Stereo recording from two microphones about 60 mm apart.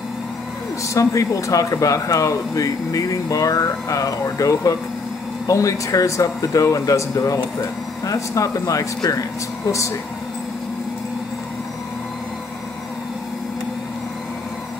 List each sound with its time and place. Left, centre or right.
0.9 s speech: left